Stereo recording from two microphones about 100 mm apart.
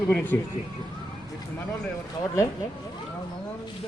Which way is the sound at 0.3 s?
20° left (ahead or behind).